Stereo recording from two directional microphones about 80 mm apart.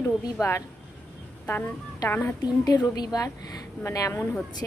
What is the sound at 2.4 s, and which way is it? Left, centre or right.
Speech, left.